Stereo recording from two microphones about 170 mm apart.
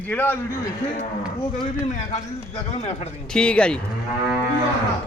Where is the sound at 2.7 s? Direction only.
40° left (ahead or behind).